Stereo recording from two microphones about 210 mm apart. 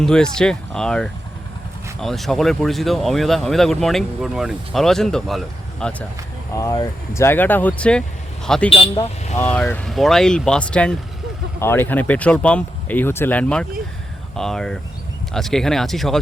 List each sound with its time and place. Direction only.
0.0 s speech: 5° left (ahead or behind)
6.5 s speech: 15° left (ahead or behind)
8.7 s speech: 25° left (ahead or behind)
9.4 s speech: 10° left (ahead or behind)